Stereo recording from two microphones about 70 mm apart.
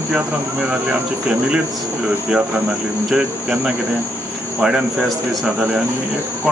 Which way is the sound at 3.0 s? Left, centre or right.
Centre.